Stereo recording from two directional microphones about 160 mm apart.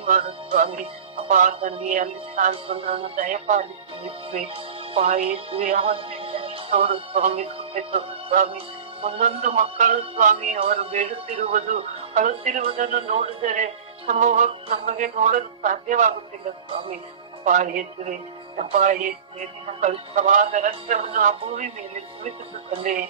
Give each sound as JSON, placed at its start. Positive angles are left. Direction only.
{"t": 0.7, "sound": "speech", "side_deg": -35}
{"t": 1.3, "sound": "speech", "side_deg": -55}
{"t": 2.5, "sound": "music", "side_deg": -40}
{"t": 3.3, "sound": "speech", "side_deg": -50}
{"t": 17.5, "sound": "speech", "side_deg": -50}
{"t": 21.4, "sound": "music", "side_deg": -35}